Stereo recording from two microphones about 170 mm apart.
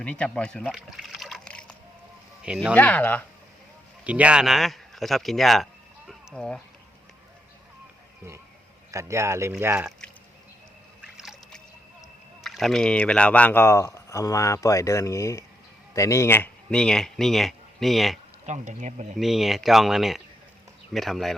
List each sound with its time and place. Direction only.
0.0 s speech: 5° left (ahead or behind)
2.4 s speech: 5° right (ahead or behind)
2.7 s speech: 10° left (ahead or behind)
4.0 s speech: 5° right (ahead or behind)
6.1 s a sound: 5° left (ahead or behind)
8.9 s speech: 15° right (ahead or behind)
11.0 s drip: centre (ahead or behind)
12.4 s speech: centre (ahead or behind)
18.4 s speech: 45° right (ahead or behind)
19.1 s speech: centre (ahead or behind)